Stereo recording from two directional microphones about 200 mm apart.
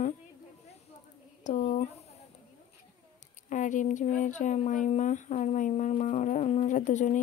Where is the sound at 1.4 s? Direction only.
40° left (ahead or behind).